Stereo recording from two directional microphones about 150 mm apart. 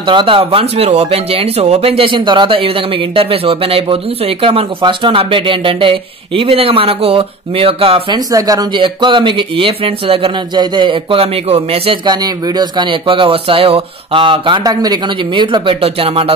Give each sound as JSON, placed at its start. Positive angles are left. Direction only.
{"t": 0.0, "sound": "speech", "side_deg": -35}
{"t": 8.3, "sound": "speech", "side_deg": -25}